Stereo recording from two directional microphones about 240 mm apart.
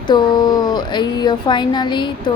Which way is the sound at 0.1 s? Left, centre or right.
Centre.